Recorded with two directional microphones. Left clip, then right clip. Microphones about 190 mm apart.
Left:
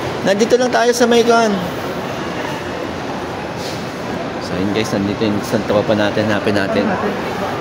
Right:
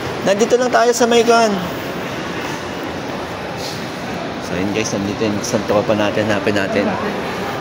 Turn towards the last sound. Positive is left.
turn(degrees=10)  # may be behind; listen again after turning